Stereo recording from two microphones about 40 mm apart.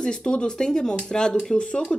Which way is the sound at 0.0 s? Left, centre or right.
Left.